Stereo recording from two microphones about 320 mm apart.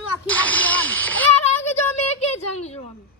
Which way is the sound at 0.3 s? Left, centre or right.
Centre.